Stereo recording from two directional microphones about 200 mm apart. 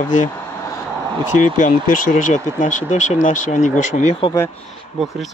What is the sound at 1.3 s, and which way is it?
Speech, 40° left (ahead or behind).